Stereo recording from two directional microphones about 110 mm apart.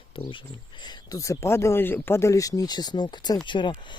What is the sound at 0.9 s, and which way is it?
Speech, 35° left (ahead or behind).